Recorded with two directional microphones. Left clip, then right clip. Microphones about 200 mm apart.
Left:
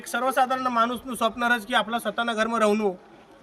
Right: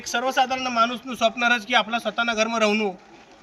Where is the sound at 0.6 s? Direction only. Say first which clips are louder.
Right 1 dB; 30° left (ahead or behind).